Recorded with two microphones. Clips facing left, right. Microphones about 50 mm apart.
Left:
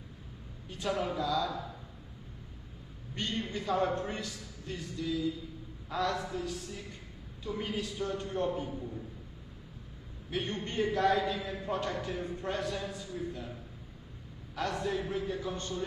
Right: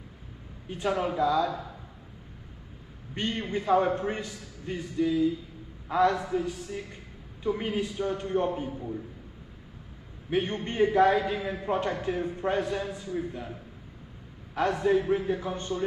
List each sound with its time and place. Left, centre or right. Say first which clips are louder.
0.9 s a man's voice: right 6 dB; right
1.4 s a man's voice: right 6 dB; centre
3.2 s a man's voice: right 5 dB; right
10.3 s a man's voice: right 6 dB; centre
11.3 s a man's voice: right 6 dB; centre
11.6 s a man's voice: right 6 dB; right
14.5 s a man's voice: right 9 dB; right